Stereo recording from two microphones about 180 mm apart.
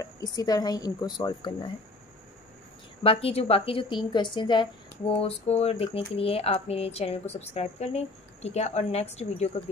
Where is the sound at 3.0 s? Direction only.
30° left (ahead or behind).